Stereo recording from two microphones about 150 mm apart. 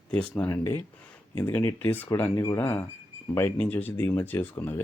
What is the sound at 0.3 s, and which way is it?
Speech, 15° left (ahead or behind).